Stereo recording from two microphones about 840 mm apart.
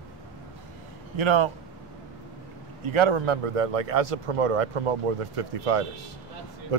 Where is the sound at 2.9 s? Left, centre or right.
Right.